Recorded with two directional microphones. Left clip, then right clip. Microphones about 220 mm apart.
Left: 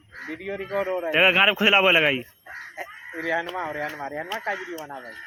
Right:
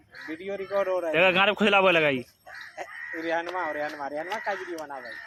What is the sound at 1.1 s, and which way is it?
Speech, centre (ahead or behind).